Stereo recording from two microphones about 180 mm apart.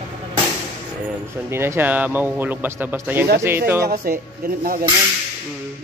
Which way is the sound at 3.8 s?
55° right (ahead or behind).